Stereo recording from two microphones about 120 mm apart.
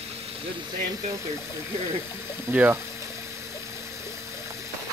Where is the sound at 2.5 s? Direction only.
15° right (ahead or behind).